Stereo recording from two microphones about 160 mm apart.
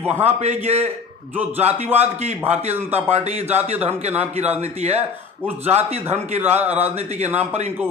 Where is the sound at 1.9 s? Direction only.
15° right (ahead or behind).